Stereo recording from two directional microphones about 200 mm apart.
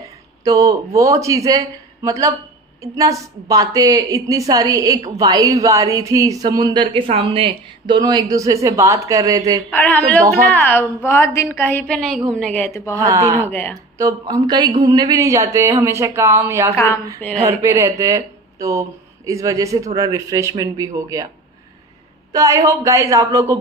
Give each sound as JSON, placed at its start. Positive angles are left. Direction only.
{"t": 0.0, "sound": "a woman's voice", "side_deg": -15}
{"t": 9.7, "sound": "a woman's voice", "side_deg": 10}
{"t": 12.9, "sound": "a woman's voice", "side_deg": -15}
{"t": 13.4, "sound": "a woman's voice", "side_deg": 10}
{"t": 13.9, "sound": "a woman's voice", "side_deg": -20}
{"t": 16.7, "sound": "a woman's voice", "side_deg": 15}
{"t": 17.6, "sound": "a woman's voice", "side_deg": -15}
{"t": 22.3, "sound": "a woman's voice", "side_deg": -15}